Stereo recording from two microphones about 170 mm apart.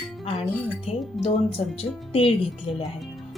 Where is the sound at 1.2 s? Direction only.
35° left (ahead or behind).